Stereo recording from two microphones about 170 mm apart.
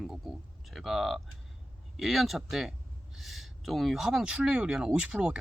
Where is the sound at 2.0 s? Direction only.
Centre (ahead or behind).